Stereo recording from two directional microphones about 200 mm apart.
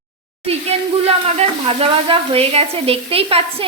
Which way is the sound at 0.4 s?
30° right (ahead or behind).